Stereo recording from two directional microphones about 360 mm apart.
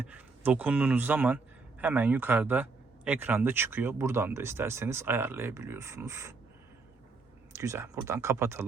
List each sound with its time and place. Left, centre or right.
0.0 s speech: centre
7.5 s speech: centre